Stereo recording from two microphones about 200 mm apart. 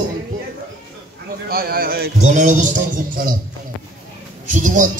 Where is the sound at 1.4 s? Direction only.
50° right (ahead or behind).